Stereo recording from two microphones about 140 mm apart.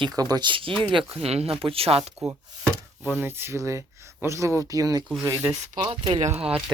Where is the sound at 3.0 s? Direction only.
15° right (ahead or behind).